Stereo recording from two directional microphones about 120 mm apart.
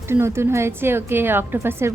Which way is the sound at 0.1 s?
20° right (ahead or behind).